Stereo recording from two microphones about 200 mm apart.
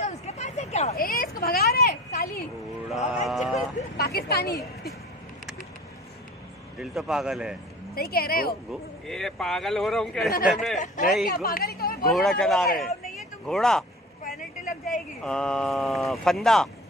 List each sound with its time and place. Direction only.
0.0 s a sound: 35° left (ahead or behind)
0.9 s a sound: 45° left (ahead or behind)
3.3 s speech: centre (ahead or behind)
3.9 s a woman's voice: 50° left (ahead or behind)
6.8 s speech: centre (ahead or behind)
7.9 s a woman's voice: 50° left (ahead or behind)
9.0 s speech: centre (ahead or behind)
11.2 s speech: 50° left (ahead or behind)
12.1 s speech: centre (ahead or behind)
14.2 s vehicle: 45° left (ahead or behind)
15.2 s speech: 5° left (ahead or behind)